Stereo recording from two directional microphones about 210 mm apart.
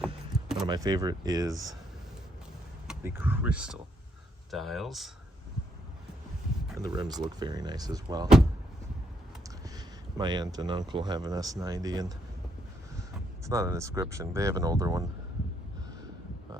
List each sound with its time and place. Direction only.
0.3 s a sound: centre (ahead or behind)
0.7 s speech: 20° right (ahead or behind)
2.8 s speech: 5° right (ahead or behind)
6.7 s speech: 20° right (ahead or behind)
9.6 s a sound: 20° right (ahead or behind)
10.9 s speech: 20° right (ahead or behind)
13.4 s speech: 15° right (ahead or behind)